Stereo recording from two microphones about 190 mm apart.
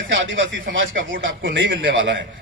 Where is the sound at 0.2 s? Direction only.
80° right.